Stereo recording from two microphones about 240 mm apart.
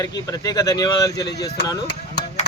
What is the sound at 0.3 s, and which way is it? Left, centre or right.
Speech, centre.